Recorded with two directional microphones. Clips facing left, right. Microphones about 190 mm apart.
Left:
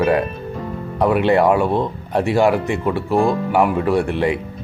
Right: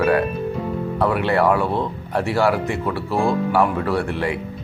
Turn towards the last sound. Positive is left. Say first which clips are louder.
# left 4 dB
turn(degrees=20)  # may be behind; listen again after turning